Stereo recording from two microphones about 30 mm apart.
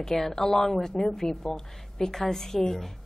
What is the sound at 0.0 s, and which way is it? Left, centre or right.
A man's voice, centre.